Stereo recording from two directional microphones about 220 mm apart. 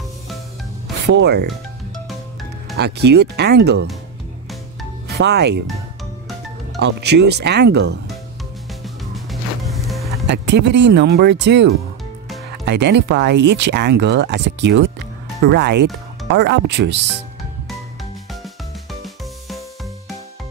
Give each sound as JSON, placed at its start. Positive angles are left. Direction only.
{"t": 1.0, "sound": "speech", "side_deg": -50}
{"t": 2.8, "sound": "speech", "side_deg": -50}
{"t": 5.0, "sound": "speech", "side_deg": -50}
{"t": 6.8, "sound": "speech", "side_deg": -50}
{"t": 8.8, "sound": "music", "side_deg": 0}
{"t": 10.2, "sound": "speech", "side_deg": -50}
{"t": 18.4, "sound": "music", "side_deg": 0}